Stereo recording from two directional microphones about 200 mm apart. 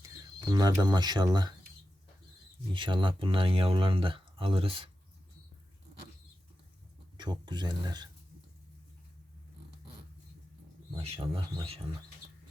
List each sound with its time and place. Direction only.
0.5 s speech: 20° right (ahead or behind)
2.7 s speech: 25° right (ahead or behind)
7.2 s speech: 20° right (ahead or behind)
10.9 s speech: 25° right (ahead or behind)